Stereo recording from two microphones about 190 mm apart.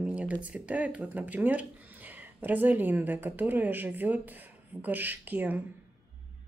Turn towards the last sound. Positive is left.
turn(degrees=-10)  # may be behind; listen again after turning